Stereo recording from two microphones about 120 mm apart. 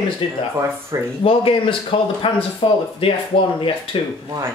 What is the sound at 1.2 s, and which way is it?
Speech, 50° left (ahead or behind).